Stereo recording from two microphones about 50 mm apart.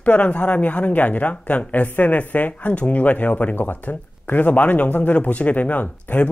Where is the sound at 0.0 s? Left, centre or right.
Left.